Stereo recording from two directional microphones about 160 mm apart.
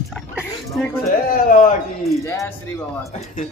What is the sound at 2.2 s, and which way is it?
Speech, 20° left (ahead or behind).